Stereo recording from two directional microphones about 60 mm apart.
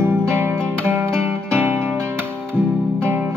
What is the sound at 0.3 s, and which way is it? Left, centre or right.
Music, right.